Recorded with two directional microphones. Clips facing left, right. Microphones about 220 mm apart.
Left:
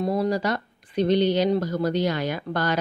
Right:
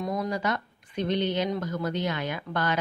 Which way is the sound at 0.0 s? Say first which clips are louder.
Left 6 dB; 30° left (ahead or behind).